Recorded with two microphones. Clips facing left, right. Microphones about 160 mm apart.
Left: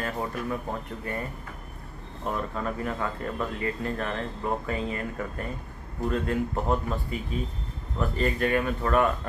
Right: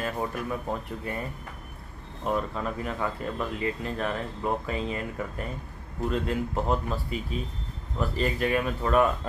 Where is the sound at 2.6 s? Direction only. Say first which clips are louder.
Even; 10° right (ahead or behind).